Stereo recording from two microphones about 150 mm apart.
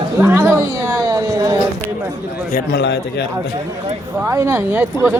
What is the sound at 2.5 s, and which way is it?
Speech, 80° left.